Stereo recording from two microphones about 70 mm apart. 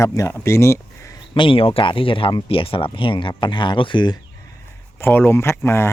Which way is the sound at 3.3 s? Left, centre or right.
Left.